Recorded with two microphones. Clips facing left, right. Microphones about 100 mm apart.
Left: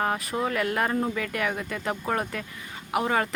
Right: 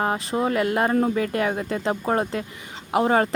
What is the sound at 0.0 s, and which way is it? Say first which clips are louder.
Speech: right 4 dB; 25° right (ahead or behind).